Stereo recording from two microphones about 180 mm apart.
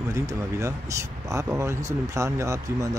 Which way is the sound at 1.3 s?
15° right (ahead or behind).